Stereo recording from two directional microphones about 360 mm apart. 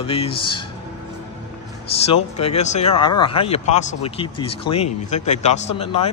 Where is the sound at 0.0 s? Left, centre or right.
Centre.